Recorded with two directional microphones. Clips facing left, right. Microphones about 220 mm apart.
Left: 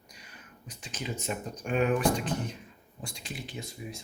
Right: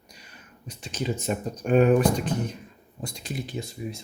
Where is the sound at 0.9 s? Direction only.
40° right (ahead or behind).